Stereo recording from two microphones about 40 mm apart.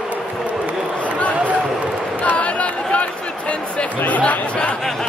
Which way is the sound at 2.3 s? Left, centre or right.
Left.